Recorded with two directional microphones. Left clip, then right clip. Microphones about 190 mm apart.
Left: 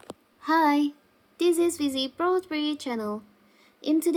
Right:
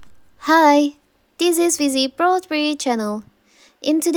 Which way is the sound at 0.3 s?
50° right (ahead or behind).